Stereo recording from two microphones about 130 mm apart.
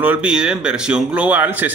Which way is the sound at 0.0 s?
10° right (ahead or behind).